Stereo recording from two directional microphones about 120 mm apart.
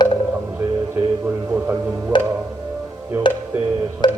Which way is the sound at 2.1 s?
40° left (ahead or behind).